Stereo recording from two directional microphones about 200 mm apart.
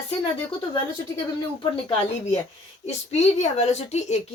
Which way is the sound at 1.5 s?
25° left (ahead or behind).